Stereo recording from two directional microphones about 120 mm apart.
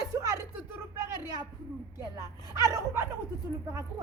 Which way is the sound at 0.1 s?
30° right (ahead or behind).